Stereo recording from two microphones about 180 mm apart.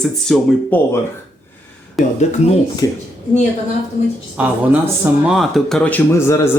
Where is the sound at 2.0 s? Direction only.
Centre (ahead or behind).